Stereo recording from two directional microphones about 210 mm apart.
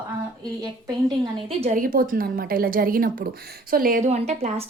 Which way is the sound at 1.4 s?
30° right (ahead or behind).